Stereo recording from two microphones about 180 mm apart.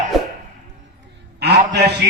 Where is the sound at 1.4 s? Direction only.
65° right (ahead or behind).